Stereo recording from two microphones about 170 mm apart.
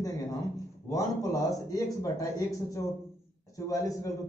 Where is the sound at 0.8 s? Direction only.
20° left (ahead or behind).